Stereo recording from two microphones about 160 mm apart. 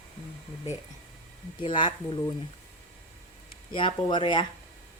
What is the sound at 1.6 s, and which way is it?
Speech, 30° left (ahead or behind).